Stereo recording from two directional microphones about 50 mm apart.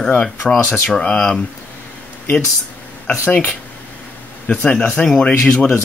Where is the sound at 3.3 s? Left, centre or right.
Left.